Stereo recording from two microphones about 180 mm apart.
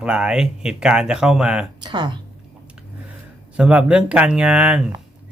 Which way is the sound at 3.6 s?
5° right (ahead or behind).